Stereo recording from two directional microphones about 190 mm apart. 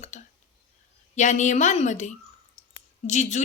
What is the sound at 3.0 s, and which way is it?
Speech, 40° left (ahead or behind).